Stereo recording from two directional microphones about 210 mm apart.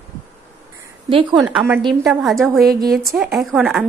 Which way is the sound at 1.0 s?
20° right (ahead or behind).